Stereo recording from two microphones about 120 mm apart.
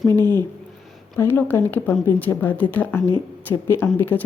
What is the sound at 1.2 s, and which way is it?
Speech, 15° left (ahead or behind).